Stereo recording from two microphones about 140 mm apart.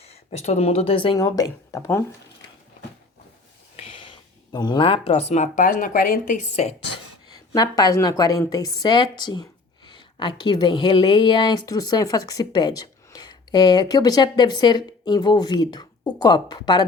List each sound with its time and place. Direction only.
0.0 s speech: 50° left (ahead or behind)
1.1 s a woman's voice: 25° left (ahead or behind)
3.8 s speech: 35° left (ahead or behind); by 6.7 s 55° left (ahead or behind)
7.5 s a woman's voice: 30° left (ahead or behind)